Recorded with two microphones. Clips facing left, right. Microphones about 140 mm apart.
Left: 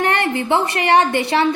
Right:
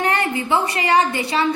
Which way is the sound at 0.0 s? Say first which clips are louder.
Left 2 dB; 65° left (ahead or behind).